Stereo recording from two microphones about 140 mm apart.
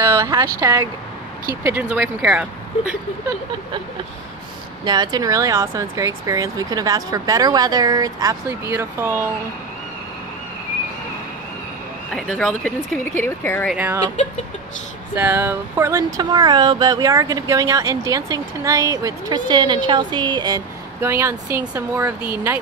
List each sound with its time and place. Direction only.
0.0 s speech: 20° right (ahead or behind)
4.8 s speech: 30° right (ahead or behind)
12.1 s speech: 5° left (ahead or behind)
13.7 s speech: 15° right (ahead or behind)
15.1 s speech: 15° right (ahead or behind); by 20.6 s 30° right (ahead or behind)
21.0 s speech: 20° right (ahead or behind)